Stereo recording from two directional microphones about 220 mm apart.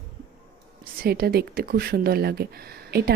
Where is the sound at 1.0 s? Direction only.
45° right (ahead or behind).